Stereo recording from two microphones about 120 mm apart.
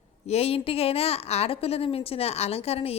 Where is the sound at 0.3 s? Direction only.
55° left (ahead or behind).